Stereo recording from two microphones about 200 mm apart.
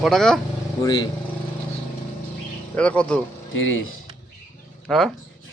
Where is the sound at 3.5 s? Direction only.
75° left (ahead or behind).